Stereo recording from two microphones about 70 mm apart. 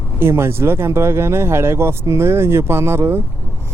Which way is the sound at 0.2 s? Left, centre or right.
Right.